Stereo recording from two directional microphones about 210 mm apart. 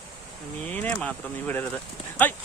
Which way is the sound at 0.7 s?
10° left (ahead or behind).